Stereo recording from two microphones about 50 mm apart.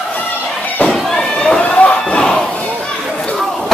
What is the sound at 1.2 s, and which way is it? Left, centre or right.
Run, centre.